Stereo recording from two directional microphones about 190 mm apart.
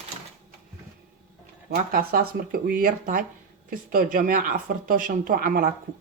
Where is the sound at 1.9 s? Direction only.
50° right (ahead or behind).